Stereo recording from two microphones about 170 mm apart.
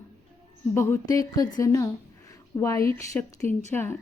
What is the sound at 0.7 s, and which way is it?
A woman's voice, 15° left (ahead or behind).